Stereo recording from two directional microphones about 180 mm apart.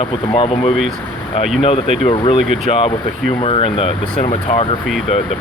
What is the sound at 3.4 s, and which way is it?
Speech, 30° left (ahead or behind).